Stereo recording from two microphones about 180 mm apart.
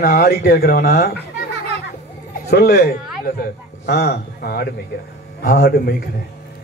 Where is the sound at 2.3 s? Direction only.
65° left (ahead or behind).